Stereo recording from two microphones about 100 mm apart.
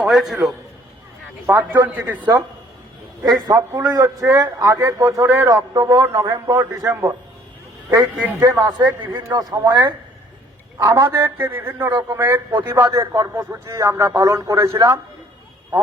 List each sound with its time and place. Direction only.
0.0 s a man's voice: 5° right (ahead or behind)
1.5 s a man's voice: 20° right (ahead or behind)
2.1 s speech: 45° right (ahead or behind)
3.4 s speech: 40° right (ahead or behind)
5.5 s speech: 40° right (ahead or behind)
6.2 s speech: 35° right (ahead or behind)
7.9 s a man's voice: 20° right (ahead or behind)
8.4 s speech: 35° right (ahead or behind)
10.8 s a man's voice: 30° right (ahead or behind)